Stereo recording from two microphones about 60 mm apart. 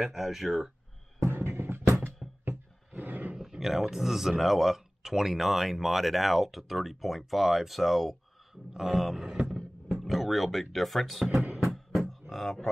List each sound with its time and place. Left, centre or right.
0.0 s speech: centre
1.2 s music: right
2.2 s a sound: centre
2.9 s roar: right
3.3 s speech: centre
11.2 s music: centre